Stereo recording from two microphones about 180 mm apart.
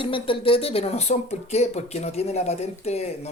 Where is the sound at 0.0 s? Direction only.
30° left (ahead or behind).